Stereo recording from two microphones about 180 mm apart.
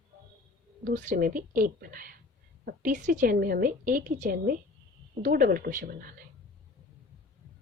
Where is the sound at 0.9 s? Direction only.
50° right (ahead or behind).